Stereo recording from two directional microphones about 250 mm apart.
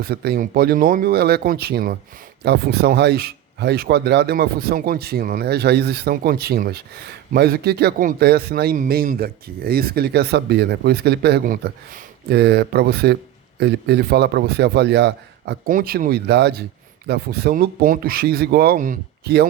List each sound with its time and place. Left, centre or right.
0.0 s speech: right